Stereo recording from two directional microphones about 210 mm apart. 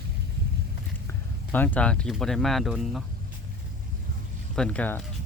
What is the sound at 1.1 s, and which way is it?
Speech, 10° left (ahead or behind).